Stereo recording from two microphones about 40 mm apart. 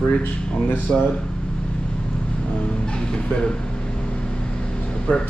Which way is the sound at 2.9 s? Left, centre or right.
Left.